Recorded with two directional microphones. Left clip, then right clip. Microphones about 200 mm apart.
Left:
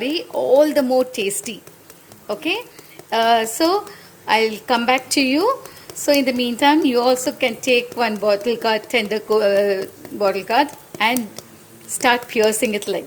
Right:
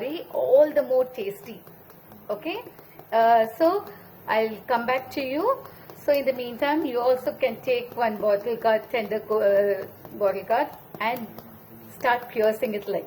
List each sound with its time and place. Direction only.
0.6 s a woman's voice: 50° left (ahead or behind)